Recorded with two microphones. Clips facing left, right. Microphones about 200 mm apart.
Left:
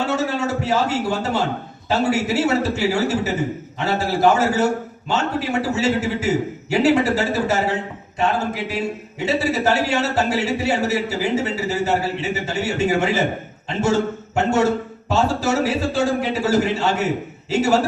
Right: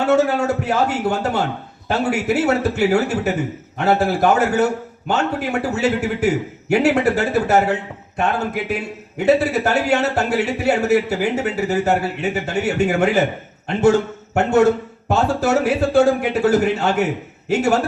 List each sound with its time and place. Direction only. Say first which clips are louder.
0.1 s speech: right 5 dB; 55° right (ahead or behind)
8.7 s speech: even; 55° right (ahead or behind)
14.3 s speech: right 4 dB; 60° right (ahead or behind)